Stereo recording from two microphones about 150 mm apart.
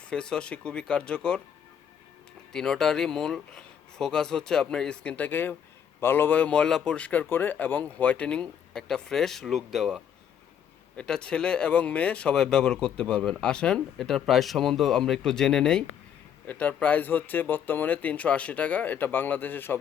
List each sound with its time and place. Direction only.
0.1 s speech: 5° left (ahead or behind)
2.5 s speech: 5° left (ahead or behind)